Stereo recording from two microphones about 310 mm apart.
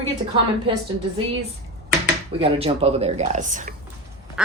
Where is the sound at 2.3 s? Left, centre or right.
Centre.